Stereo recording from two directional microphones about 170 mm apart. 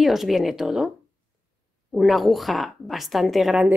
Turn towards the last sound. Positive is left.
turn(degrees=0)  # may be behind; listen again after turning